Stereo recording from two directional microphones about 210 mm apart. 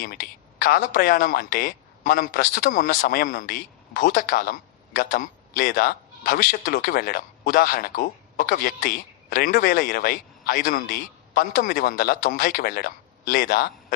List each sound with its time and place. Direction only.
0.0 s speech: 45° left (ahead or behind)